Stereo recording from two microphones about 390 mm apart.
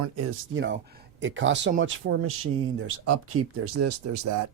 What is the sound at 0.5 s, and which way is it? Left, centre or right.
Speech, right.